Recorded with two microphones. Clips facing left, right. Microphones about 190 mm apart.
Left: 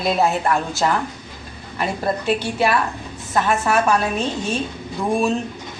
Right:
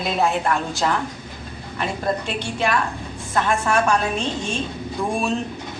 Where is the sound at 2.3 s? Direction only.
5° left (ahead or behind).